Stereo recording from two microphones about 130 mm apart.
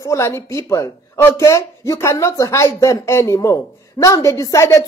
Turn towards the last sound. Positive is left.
turn(degrees=25)  # may be behind; listen again after turning